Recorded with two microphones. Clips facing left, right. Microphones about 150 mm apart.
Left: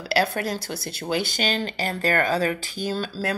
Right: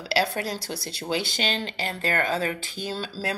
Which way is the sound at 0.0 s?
50° left (ahead or behind).